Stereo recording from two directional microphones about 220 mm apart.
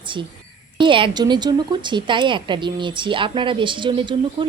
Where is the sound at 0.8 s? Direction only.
20° right (ahead or behind).